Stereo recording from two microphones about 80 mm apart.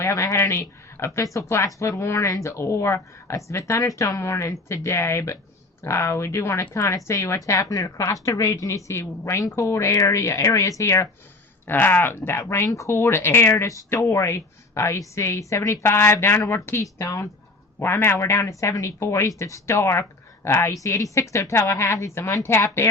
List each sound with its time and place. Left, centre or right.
0.2 s speech: left
11.6 s speech: left
17.0 s speech: left
17.7 s speech: left